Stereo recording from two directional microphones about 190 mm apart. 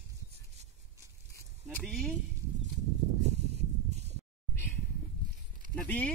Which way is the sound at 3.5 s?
35° right (ahead or behind).